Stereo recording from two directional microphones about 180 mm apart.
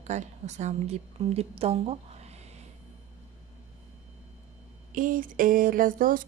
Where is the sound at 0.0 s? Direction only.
40° right (ahead or behind).